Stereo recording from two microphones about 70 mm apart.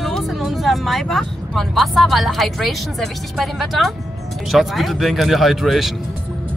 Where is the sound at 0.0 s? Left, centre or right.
Centre.